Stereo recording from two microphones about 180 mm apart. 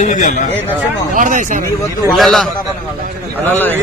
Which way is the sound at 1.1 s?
45° right (ahead or behind).